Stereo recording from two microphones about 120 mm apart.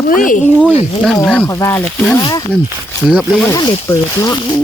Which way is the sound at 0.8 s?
60° left (ahead or behind).